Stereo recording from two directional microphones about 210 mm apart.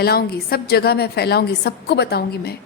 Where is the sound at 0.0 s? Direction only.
45° left (ahead or behind).